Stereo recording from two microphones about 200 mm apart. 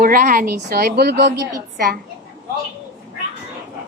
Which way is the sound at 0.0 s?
45° right (ahead or behind).